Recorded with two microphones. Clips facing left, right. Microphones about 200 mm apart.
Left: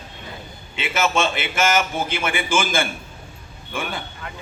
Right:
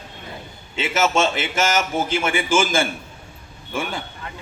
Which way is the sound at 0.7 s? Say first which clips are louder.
Right 2 dB; 40° right (ahead or behind).